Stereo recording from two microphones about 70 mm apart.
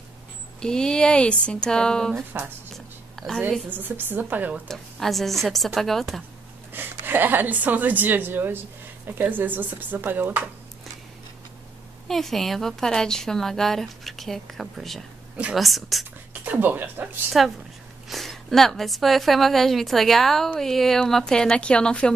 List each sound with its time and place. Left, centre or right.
0.6 s speech: centre
2.7 s a sound: centre
3.7 s a woman's voice: right
4.6 s a woman's voice: centre
6.7 s a woman's voice: right
12.1 s a woman's voice: centre
16.4 s a woman's voice: right
18.0 s a woman's voice: centre